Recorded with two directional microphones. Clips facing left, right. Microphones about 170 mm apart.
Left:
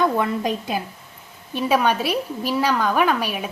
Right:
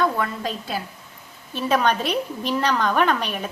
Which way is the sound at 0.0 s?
20° left (ahead or behind).